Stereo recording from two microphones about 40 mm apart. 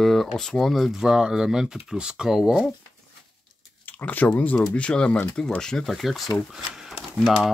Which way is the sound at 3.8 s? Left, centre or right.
Left.